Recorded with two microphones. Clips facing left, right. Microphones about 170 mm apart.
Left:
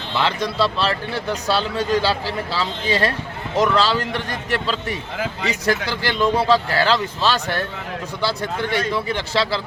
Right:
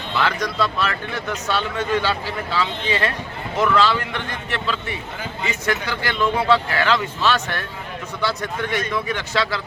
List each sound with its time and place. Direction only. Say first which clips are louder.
0.2 s speech: left 1 dB; 25° left (ahead or behind)
5.1 s speech: left 4 dB; 90° left
5.9 s a man's voice: left 2 dB; 35° left (ahead or behind)